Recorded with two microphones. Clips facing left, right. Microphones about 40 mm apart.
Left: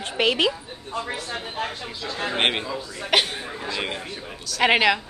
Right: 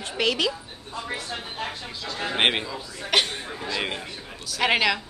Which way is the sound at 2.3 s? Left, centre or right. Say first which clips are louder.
Right 1 dB; centre.